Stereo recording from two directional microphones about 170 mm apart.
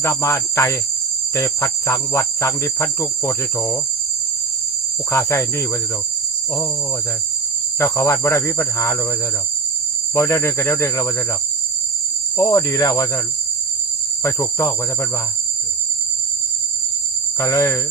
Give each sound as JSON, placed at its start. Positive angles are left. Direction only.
{"t": 0.0, "sound": "cricket", "side_deg": 15}
{"t": 5.1, "sound": "cricket", "side_deg": 15}
{"t": 7.8, "sound": "cricket", "side_deg": 15}
{"t": 10.2, "sound": "cricket", "side_deg": 15}
{"t": 12.4, "sound": "cricket", "side_deg": 20}
{"t": 14.3, "sound": "cricket", "side_deg": 15}
{"t": 17.3, "sound": "cricket", "side_deg": 20}